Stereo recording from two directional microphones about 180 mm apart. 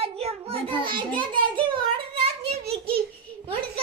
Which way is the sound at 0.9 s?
25° right (ahead or behind).